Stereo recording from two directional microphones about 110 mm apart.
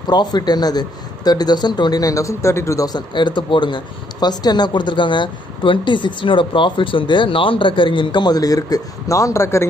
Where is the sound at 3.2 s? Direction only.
45° left (ahead or behind).